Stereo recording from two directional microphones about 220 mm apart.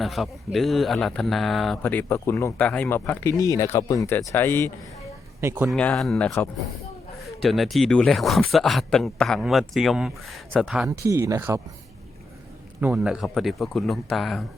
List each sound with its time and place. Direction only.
0.0 s speech: centre (ahead or behind)
5.4 s speech: 10° right (ahead or behind)
5.6 s a man's voice: 5° left (ahead or behind)
11.1 s speech: 10° right (ahead or behind)
12.8 s a man's voice: 5° right (ahead or behind)